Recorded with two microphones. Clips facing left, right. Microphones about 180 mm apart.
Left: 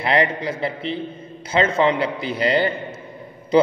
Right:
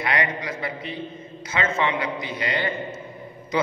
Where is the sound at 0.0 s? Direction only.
30° left (ahead or behind).